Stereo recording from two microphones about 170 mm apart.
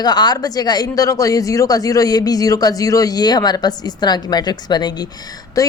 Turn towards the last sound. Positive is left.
turn(degrees=20)  # may be behind; listen again after turning